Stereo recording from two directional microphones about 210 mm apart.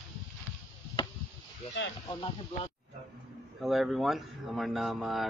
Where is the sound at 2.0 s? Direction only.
25° left (ahead or behind).